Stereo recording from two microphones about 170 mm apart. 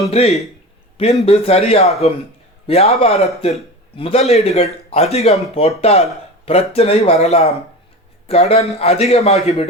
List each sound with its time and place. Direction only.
0.1 s a man's voice: 40° left (ahead or behind)